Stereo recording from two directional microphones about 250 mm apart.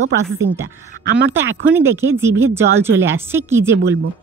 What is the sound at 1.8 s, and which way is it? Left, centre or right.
Speech, centre.